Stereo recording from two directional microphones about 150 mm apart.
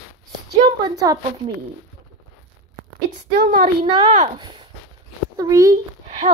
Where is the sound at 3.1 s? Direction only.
65° right (ahead or behind).